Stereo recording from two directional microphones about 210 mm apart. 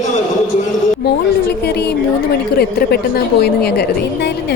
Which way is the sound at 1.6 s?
50° left (ahead or behind).